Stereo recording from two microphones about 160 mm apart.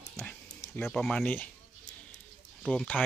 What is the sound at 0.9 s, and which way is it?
Speech, 5° left (ahead or behind).